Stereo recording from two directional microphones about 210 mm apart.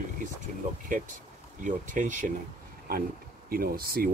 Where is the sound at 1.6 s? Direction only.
35° right (ahead or behind).